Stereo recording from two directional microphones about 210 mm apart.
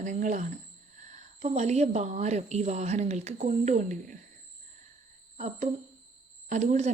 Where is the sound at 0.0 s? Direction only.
35° right (ahead or behind).